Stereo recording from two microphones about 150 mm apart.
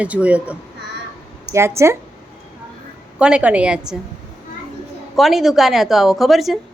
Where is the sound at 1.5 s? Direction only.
20° right (ahead or behind).